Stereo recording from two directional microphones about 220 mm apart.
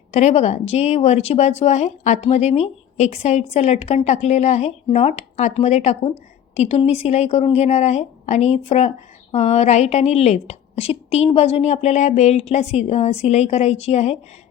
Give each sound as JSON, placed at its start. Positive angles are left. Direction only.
{"t": 0.1, "sound": "a woman's voice", "side_deg": 30}